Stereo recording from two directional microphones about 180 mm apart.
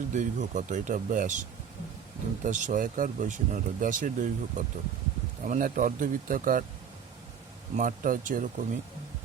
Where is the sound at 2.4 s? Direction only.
45° right (ahead or behind).